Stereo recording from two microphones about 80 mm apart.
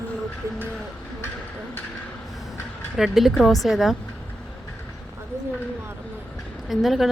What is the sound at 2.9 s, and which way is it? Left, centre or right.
A woman's voice, centre.